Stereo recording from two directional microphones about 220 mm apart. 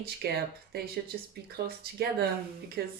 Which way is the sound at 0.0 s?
45° right (ahead or behind).